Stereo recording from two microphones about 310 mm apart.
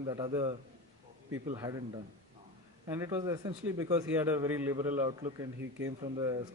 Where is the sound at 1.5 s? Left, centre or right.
Centre.